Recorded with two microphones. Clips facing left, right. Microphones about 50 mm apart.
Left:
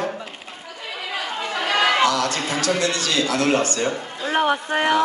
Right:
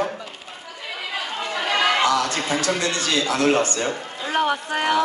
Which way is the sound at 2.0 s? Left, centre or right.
Right.